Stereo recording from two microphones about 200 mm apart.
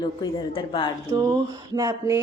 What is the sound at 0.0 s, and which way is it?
Speech, 20° left (ahead or behind).